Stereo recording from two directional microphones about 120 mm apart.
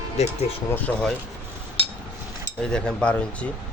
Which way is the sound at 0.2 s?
65° left (ahead or behind).